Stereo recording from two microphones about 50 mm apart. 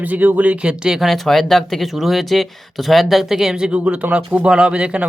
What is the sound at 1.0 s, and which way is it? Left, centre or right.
Speech, centre.